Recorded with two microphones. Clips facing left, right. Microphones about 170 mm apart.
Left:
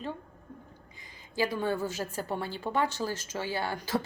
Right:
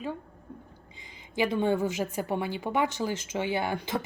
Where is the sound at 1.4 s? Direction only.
20° right (ahead or behind).